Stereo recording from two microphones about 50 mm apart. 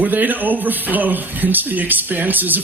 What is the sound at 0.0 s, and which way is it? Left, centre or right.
A man's voice, right.